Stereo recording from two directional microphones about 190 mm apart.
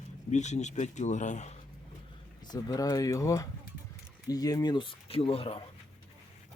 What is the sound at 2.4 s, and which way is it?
Speech, 20° left (ahead or behind).